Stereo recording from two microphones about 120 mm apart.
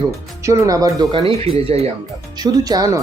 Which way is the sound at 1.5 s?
55° right (ahead or behind).